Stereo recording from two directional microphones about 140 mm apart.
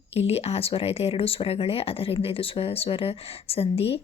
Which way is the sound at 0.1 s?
45° left (ahead or behind).